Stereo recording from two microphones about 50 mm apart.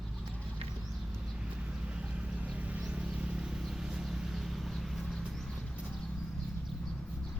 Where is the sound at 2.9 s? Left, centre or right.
Right; by 4.5 s centre.